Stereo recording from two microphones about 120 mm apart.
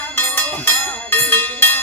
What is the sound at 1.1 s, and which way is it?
Music, 15° left (ahead or behind).